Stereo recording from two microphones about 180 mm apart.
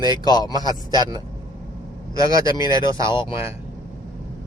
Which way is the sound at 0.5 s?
20° right (ahead or behind).